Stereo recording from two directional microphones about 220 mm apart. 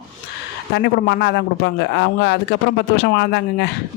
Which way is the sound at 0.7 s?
50° left (ahead or behind).